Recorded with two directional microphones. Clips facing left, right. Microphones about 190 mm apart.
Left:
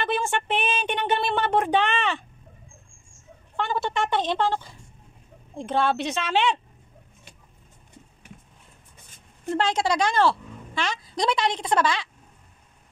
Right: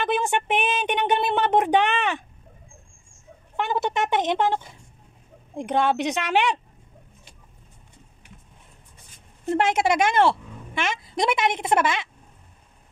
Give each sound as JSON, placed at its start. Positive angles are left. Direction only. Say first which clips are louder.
{"t": 0.0, "sound": "speech", "louder": "right 2 dB", "side_deg": -15}
{"t": 3.5, "sound": "a woman's voice", "louder": "right 2 dB", "side_deg": -20}
{"t": 9.6, "sound": "a woman's voice", "louder": "right 2 dB", "side_deg": -20}